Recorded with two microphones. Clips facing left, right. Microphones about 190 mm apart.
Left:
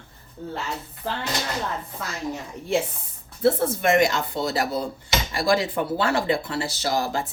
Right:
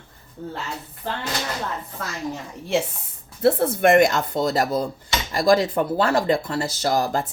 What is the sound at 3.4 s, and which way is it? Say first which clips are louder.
Speech: right 3 dB; 55° right (ahead or behind).